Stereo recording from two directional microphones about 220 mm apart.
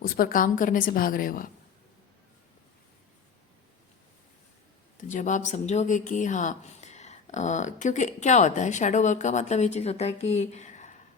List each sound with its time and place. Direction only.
0.0 s speech: 40° left (ahead or behind)
4.9 s speech: 35° left (ahead or behind)